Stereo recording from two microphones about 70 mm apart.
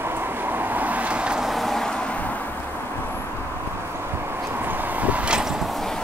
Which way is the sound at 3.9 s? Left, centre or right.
Right.